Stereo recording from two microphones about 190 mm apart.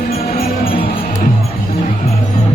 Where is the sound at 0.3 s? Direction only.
50° left (ahead or behind).